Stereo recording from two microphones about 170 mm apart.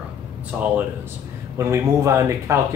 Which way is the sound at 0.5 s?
5° right (ahead or behind).